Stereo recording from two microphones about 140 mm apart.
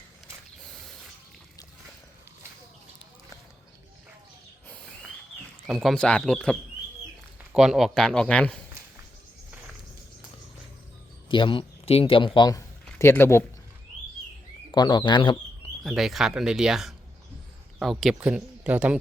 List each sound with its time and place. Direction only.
4.7 s a sound: 10° left (ahead or behind)
5.6 s speech: centre (ahead or behind)
11.3 s a man's voice: 35° left (ahead or behind)
13.0 s speech: 20° left (ahead or behind)
14.7 s a man's voice: 30° left (ahead or behind)
15.8 s speech: centre (ahead or behind)